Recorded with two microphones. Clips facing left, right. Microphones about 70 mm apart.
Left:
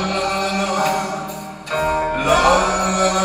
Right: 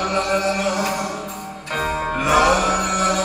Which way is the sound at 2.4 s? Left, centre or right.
Left.